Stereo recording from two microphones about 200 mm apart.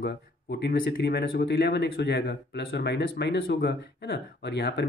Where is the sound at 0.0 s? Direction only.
50° left (ahead or behind).